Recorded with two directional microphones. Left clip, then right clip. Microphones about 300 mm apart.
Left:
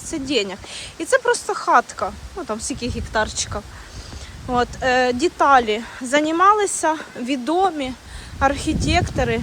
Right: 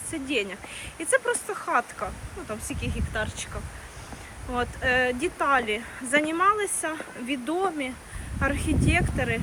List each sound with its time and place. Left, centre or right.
0.1 s speech: centre
4.5 s speech: centre